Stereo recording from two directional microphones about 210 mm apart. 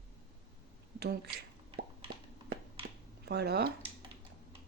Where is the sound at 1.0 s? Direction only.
50° right (ahead or behind).